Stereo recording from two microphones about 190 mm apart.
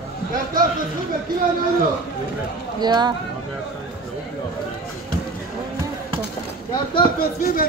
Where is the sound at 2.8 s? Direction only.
20° right (ahead or behind).